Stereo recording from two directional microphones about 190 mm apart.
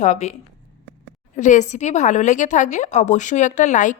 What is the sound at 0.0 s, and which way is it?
Speech, 40° left (ahead or behind).